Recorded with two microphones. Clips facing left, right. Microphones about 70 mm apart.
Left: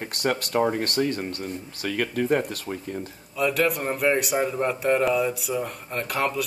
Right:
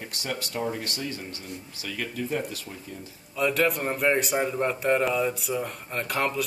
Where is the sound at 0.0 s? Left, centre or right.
Left.